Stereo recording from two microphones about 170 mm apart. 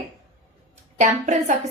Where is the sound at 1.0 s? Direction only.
45° right (ahead or behind).